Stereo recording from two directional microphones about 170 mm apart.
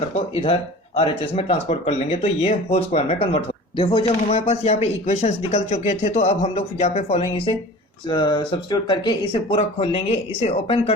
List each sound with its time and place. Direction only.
0.3 s speech: 35° left (ahead or behind)